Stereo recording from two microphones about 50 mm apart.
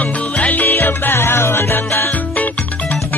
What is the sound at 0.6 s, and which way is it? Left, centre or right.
Music, left.